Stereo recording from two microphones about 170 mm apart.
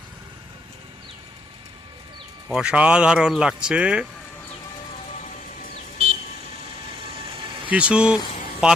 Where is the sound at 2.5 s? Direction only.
5° right (ahead or behind).